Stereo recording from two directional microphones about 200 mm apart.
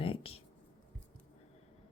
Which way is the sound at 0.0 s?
25° left (ahead or behind).